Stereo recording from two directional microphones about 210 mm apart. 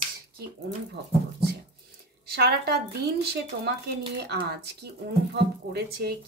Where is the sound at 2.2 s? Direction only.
50° right (ahead or behind).